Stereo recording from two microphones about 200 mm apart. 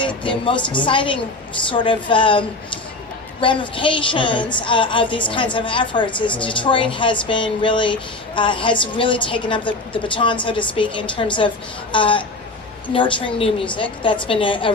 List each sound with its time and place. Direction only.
0.2 s a woman's voice: 25° left (ahead or behind)
3.4 s a woman's voice: 25° left (ahead or behind)